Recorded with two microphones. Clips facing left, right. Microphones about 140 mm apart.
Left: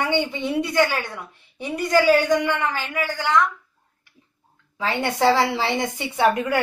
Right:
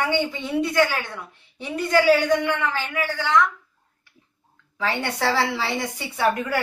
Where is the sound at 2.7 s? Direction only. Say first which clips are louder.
Even; 15° left (ahead or behind).